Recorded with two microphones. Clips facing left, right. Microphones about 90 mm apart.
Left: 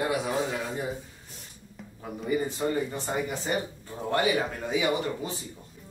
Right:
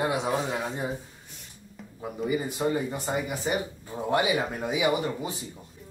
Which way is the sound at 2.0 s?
10° right (ahead or behind).